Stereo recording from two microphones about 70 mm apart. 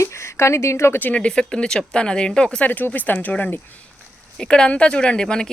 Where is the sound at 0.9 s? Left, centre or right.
Left.